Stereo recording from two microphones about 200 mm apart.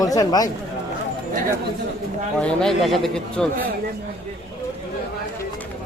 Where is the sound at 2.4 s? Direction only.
5° left (ahead or behind).